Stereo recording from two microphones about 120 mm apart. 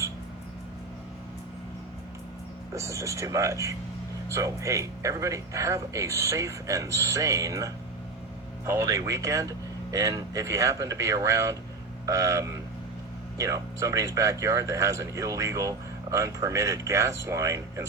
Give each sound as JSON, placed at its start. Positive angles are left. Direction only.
{"t": 2.7, "sound": "speech", "side_deg": -25}